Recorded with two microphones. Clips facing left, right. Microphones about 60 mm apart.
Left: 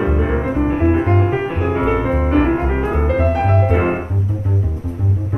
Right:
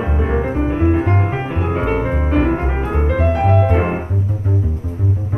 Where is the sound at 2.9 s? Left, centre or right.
Left.